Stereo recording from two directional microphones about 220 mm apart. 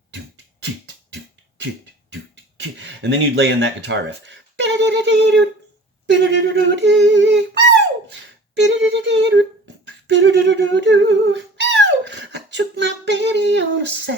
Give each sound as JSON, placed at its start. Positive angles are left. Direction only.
{"t": 1.1, "sound": "beatboxing", "side_deg": -55}
{"t": 2.3, "sound": "a sound", "side_deg": -55}
{"t": 6.1, "sound": "humming", "side_deg": -55}